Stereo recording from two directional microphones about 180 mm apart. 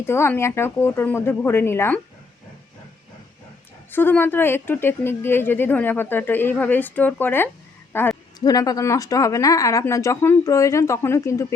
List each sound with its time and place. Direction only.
0.0 s a woman's voice: 15° left (ahead or behind)
3.9 s a woman's voice: 10° left (ahead or behind)